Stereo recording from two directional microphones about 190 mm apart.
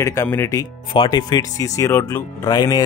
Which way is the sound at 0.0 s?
15° left (ahead or behind).